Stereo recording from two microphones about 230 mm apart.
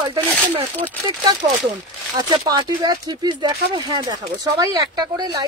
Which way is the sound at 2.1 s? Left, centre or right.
Centre.